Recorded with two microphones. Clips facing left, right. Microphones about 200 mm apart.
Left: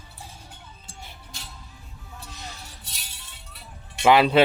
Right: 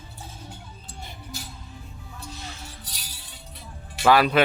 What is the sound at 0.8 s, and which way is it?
Music, centre (ahead or behind).